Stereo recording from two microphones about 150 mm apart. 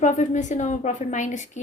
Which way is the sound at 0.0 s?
55° left (ahead or behind).